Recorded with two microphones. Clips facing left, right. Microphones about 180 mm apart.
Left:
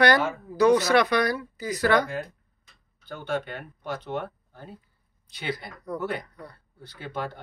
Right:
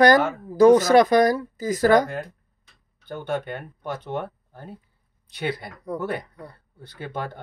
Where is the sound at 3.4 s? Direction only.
55° right (ahead or behind).